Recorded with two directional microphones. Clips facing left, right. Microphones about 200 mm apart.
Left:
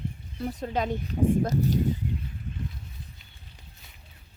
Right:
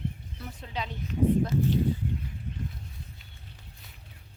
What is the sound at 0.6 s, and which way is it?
Speech, 50° left (ahead or behind).